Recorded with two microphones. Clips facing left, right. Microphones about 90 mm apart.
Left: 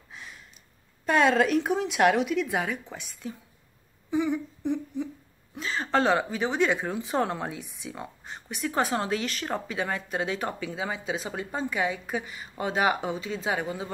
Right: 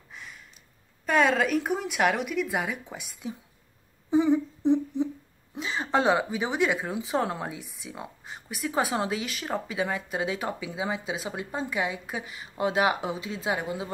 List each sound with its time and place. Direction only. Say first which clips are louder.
1.0 s speech: left 1 dB; centre (ahead or behind)
4.1 s humming: right 5 dB; 30° right (ahead or behind)
5.6 s a woman's voice: even; 15° right (ahead or behind)